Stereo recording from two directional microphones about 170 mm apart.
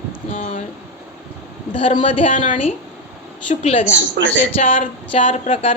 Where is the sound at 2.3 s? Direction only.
50° left (ahead or behind).